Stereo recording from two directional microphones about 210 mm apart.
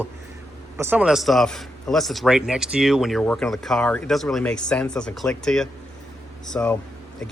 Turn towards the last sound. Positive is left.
turn(degrees=5)  # may be behind; listen again after turning